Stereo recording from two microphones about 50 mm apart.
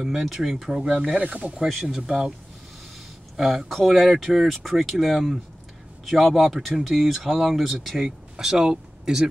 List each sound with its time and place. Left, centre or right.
0.0 s speech: centre
0.8 s speech: centre
1.7 s speech: centre
2.0 s speech: centre
3.3 s speech: centre